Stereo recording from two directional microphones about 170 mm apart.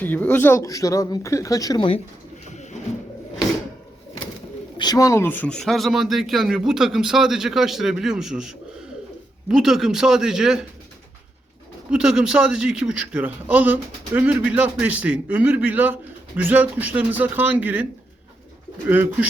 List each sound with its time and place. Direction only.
0.0 s speech: 10° left (ahead or behind)
4.8 s speech: 20° left (ahead or behind); by 10.7 s 5° right (ahead or behind)
11.9 s a man's voice: 5° right (ahead or behind)
18.9 s a man's voice: 10° right (ahead or behind)